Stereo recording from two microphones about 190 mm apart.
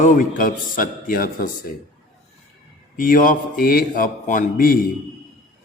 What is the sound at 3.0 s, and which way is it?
Mantra, 45° left (ahead or behind).